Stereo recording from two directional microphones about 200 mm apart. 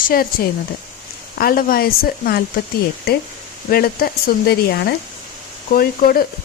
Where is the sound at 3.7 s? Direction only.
50° left (ahead or behind).